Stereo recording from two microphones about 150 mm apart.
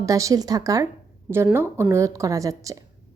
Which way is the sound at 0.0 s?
20° right (ahead or behind).